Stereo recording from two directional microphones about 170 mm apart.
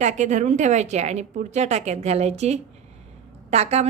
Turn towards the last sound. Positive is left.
turn(degrees=-40)  # may be behind; listen again after turning